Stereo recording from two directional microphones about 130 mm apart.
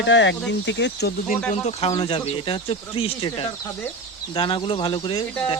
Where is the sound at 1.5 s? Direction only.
55° left (ahead or behind).